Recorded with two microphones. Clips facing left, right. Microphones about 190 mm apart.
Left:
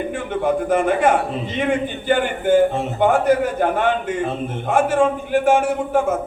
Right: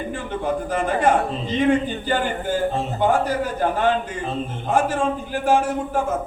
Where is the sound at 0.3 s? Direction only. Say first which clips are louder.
Left 6 dB; 55° left (ahead or behind).